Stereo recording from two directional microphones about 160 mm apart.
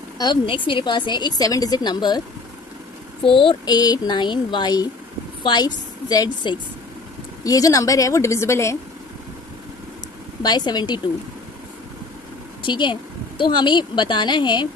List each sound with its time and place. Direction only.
0.2 s a woman's voice: 30° left (ahead or behind)
3.3 s a woman's voice: 35° left (ahead or behind); by 8.7 s 15° left (ahead or behind)
10.4 s a woman's voice: 25° left (ahead or behind)
12.6 s a woman's voice: 30° left (ahead or behind)